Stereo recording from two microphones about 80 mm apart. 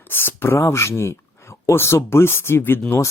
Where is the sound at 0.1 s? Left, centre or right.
Left.